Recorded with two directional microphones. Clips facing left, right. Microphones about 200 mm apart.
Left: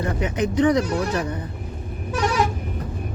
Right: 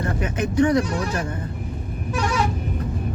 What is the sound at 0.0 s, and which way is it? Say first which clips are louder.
Speech: left 1 dB; 20° left (ahead or behind).